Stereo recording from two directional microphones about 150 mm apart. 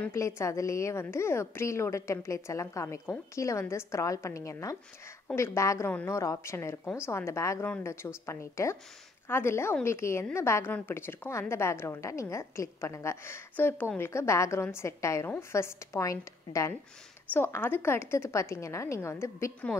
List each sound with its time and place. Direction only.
0.0 s a woman's voice: 20° left (ahead or behind)